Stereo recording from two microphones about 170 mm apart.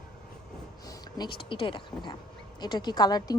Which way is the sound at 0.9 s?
25° left (ahead or behind).